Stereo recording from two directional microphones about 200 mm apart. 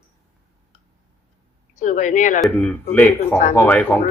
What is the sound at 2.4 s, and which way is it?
Speech, 10° left (ahead or behind).